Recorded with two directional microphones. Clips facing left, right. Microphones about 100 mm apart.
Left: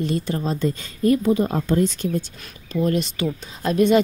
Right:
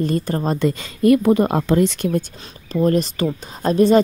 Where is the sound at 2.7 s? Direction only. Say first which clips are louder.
Right 4 dB; 40° right (ahead or behind).